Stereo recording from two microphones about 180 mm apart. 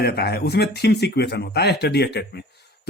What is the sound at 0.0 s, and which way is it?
Speech, 60° left (ahead or behind).